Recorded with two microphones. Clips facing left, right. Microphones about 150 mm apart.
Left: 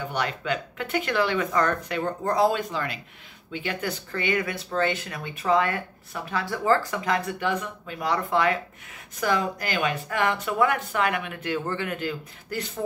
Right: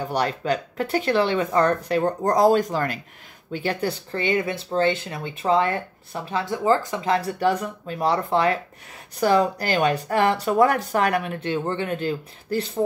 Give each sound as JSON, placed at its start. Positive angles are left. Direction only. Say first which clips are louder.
{"t": 0.0, "sound": "speech", "louder": "right 5 dB", "side_deg": -35}
{"t": 3.5, "sound": "speech", "louder": "right 5 dB", "side_deg": -35}
{"t": 7.2, "sound": "speech", "louder": "right 5 dB", "side_deg": -35}